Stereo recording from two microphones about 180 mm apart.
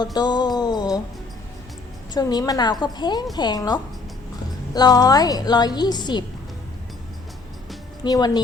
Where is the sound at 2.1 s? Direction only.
20° left (ahead or behind).